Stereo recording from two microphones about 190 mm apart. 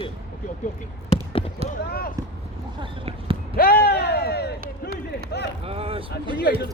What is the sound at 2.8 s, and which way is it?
Basketball bounce, 30° right (ahead or behind).